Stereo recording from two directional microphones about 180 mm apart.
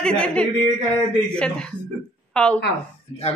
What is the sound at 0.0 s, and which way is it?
A woman's voice, 5° left (ahead or behind).